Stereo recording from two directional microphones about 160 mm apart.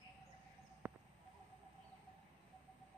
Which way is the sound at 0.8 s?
15° right (ahead or behind).